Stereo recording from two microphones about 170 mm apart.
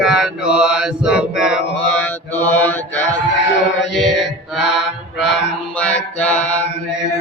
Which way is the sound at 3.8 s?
90° left.